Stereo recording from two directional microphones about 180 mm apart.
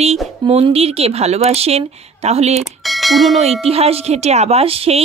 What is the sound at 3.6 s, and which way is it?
Speech, 35° right (ahead or behind).